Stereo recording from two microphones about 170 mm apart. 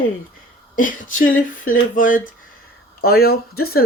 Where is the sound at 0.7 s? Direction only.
50° left (ahead or behind).